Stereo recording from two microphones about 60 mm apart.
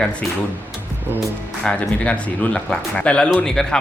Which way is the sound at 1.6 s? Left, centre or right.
Centre.